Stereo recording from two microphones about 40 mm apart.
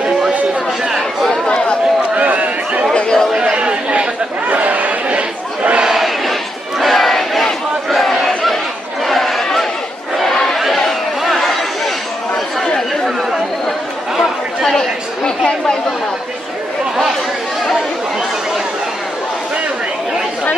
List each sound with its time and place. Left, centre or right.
2.1 s a sound: right
2.9 s chatter: left
3.5 s chatter: right
4.5 s chatter: right
5.8 s crowd: centre
6.8 s battle cry: centre
9.0 s crowd: centre
11.2 s chatter: centre
15.2 s chatter: left